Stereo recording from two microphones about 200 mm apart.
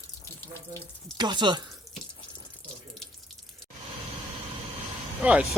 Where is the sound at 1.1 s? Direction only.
20° right (ahead or behind).